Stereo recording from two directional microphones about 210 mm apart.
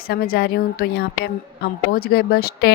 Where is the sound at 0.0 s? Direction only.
45° left (ahead or behind).